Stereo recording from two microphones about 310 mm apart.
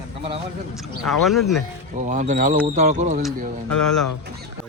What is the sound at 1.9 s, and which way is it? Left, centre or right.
Speech, right.